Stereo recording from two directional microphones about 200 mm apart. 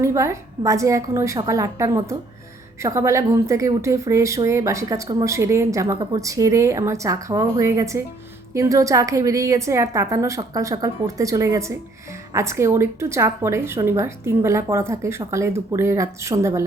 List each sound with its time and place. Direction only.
0.0 s speech: 15° right (ahead or behind)